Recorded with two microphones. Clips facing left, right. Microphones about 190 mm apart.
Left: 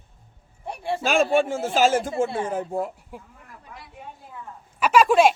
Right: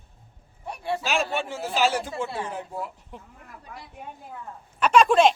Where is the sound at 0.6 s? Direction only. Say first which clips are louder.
Left 1 dB; 25° left (ahead or behind).